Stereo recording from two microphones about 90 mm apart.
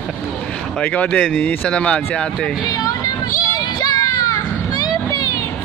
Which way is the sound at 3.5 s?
50° left (ahead or behind).